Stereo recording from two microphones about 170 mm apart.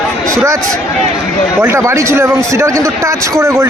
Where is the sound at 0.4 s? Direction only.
20° right (ahead or behind).